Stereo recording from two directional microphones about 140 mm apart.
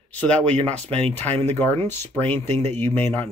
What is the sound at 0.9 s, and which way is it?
Speech, 45° right (ahead or behind).